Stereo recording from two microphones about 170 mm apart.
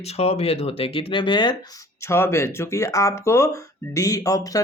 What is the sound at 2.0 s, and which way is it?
Speech, 15° left (ahead or behind).